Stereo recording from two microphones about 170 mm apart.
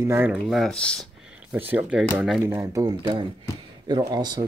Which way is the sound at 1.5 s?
10° right (ahead or behind).